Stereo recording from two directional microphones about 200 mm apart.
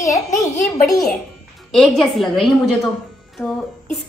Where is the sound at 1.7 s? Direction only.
Centre (ahead or behind).